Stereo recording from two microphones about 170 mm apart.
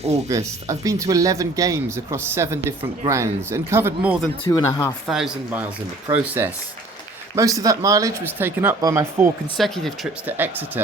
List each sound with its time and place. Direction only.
0.3 s speech: 20° right (ahead or behind)
4.4 s speech: 20° left (ahead or behind)
5.0 s speech: 5° right (ahead or behind)
9.6 s speech: centre (ahead or behind)
10.2 s speech: 10° right (ahead or behind)